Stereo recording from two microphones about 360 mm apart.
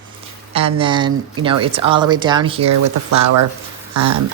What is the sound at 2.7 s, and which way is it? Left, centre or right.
Speech, right.